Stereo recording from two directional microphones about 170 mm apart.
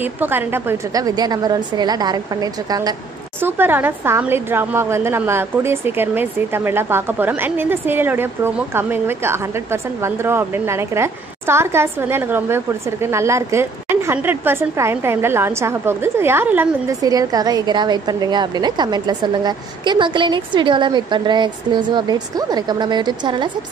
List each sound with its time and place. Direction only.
0.0 s a woman's voice: 10° right (ahead or behind); by 23.5 s 25° right (ahead or behind)